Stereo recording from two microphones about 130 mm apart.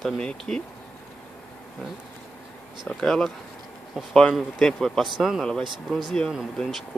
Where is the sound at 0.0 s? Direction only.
5° left (ahead or behind).